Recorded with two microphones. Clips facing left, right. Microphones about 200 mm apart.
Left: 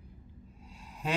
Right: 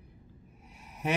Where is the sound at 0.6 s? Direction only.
20° right (ahead or behind).